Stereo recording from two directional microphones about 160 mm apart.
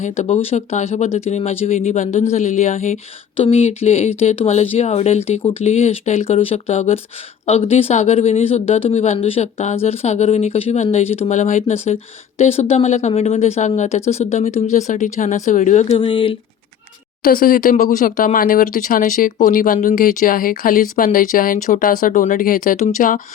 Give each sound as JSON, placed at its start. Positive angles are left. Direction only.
{"t": 0.0, "sound": "speech", "side_deg": 45}
{"t": 16.0, "sound": "speech", "side_deg": 35}
{"t": 17.2, "sound": "speech", "side_deg": 60}